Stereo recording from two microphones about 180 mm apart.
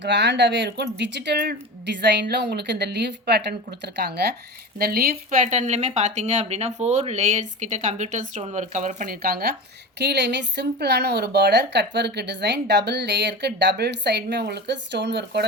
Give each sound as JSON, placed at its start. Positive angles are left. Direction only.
{"t": 0.0, "sound": "a woman's voice", "side_deg": -75}